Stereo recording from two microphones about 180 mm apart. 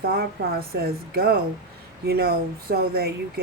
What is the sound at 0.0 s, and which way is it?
Speech, 60° right (ahead or behind).